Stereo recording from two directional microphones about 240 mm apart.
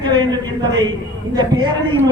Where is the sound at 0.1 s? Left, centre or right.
Centre.